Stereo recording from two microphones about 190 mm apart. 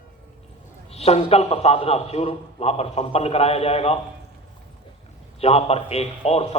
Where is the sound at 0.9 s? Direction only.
35° left (ahead or behind).